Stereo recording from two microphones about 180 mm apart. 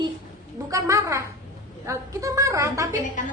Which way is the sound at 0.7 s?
15° right (ahead or behind).